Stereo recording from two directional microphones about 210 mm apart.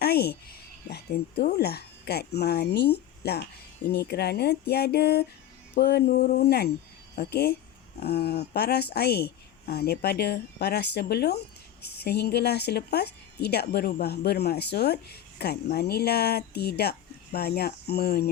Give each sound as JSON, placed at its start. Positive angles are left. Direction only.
{"t": 0.0, "sound": "speech", "side_deg": 50}